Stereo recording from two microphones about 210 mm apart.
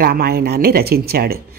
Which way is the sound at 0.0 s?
45° right (ahead or behind).